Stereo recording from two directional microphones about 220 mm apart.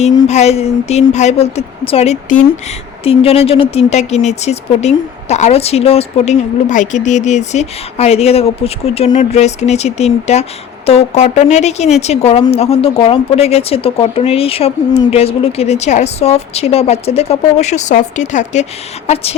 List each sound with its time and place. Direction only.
0.3 s speech: 30° left (ahead or behind)